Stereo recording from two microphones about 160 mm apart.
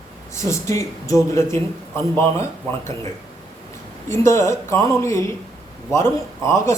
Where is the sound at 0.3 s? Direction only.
20° left (ahead or behind).